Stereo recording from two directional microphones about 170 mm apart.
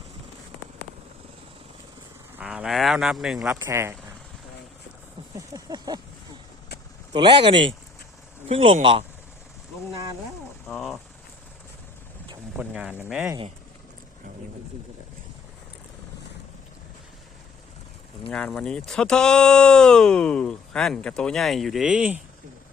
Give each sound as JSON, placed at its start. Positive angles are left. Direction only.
{"t": 2.3, "sound": "speech", "side_deg": -5}
{"t": 5.5, "sound": "a sound", "side_deg": -20}
{"t": 7.1, "sound": "speech", "side_deg": -25}
{"t": 10.7, "sound": "a sound", "side_deg": 0}
{"t": 12.5, "sound": "speech", "side_deg": -5}
{"t": 18.3, "sound": "speech", "side_deg": 5}